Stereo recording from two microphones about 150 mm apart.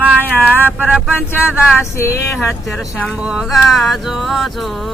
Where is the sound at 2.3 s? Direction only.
5° left (ahead or behind).